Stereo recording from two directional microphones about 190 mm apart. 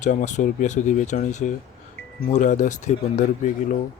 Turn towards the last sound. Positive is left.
turn(degrees=40)  # may be behind; listen again after turning